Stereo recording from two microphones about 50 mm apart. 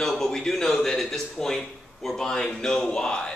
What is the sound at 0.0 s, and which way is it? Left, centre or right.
A man's voice, centre.